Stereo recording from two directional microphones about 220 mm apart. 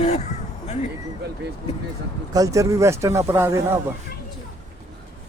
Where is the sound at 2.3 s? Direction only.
15° right (ahead or behind).